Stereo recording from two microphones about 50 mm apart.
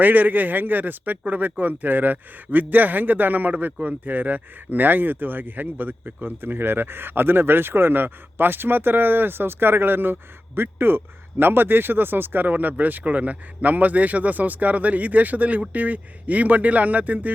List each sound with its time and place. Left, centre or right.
0.0 s speech: right